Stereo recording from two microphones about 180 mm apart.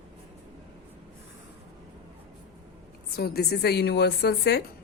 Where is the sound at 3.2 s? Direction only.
60° left (ahead or behind).